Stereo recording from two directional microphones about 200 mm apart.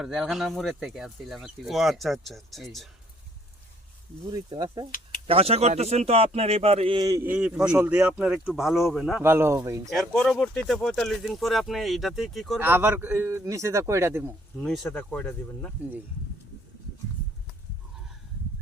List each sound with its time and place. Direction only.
0.0 s speech: centre (ahead or behind)
4.3 s speech: 20° right (ahead or behind); by 9.2 s centre (ahead or behind)
9.2 s speech: 10° right (ahead or behind)
9.9 s speech: centre (ahead or behind)
12.5 s speech: 10° right (ahead or behind)
14.6 s speech: 5° left (ahead or behind)